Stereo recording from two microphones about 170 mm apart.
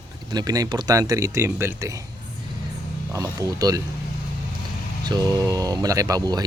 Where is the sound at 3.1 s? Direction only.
20° right (ahead or behind).